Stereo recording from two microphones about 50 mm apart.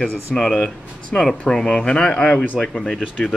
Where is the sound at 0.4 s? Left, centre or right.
Centre.